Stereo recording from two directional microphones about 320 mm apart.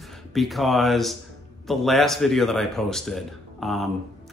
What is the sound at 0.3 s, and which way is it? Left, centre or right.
Speech, centre.